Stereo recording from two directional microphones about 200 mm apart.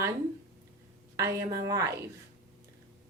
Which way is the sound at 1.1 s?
15° right (ahead or behind).